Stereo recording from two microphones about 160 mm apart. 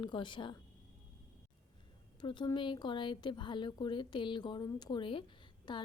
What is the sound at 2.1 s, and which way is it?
A woman's voice, 30° left (ahead or behind).